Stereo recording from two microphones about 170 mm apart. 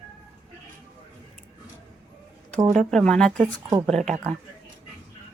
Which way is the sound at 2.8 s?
5° left (ahead or behind).